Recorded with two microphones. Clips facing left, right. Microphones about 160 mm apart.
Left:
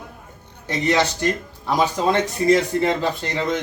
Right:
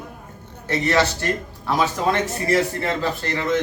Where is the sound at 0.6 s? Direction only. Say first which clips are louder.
Even; 15° left (ahead or behind).